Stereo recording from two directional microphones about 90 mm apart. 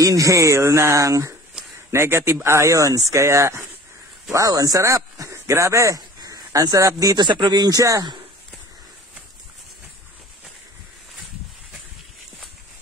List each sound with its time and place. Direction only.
0.0 s speech: 40° right (ahead or behind)
7.2 s speech: 55° right (ahead or behind); by 8.1 s 40° right (ahead or behind)